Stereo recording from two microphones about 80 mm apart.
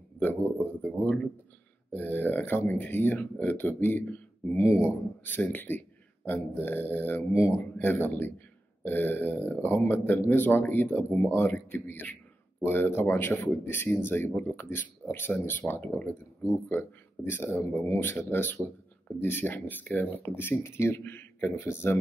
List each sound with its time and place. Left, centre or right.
0.2 s speech: left
16.6 s speech: left